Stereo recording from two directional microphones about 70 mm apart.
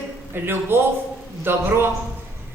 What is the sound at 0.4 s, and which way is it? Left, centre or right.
A woman's voice, right.